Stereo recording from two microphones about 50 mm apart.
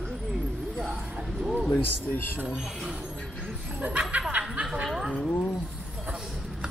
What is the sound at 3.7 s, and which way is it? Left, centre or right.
Speech, right.